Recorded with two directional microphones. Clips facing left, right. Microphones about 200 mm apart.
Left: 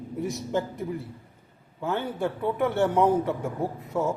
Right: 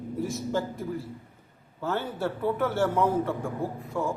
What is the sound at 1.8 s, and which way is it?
A man's voice, 15° left (ahead or behind).